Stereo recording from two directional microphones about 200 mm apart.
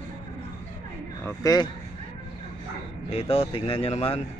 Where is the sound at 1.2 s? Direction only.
20° left (ahead or behind).